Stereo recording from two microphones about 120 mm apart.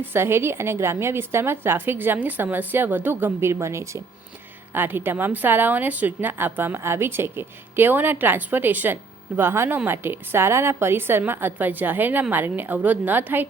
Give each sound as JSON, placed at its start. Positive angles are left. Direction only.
{"t": 0.1, "sound": "a woman's voice", "side_deg": -20}